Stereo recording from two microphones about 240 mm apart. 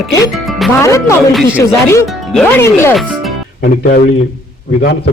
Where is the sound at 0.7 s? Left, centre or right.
Centre.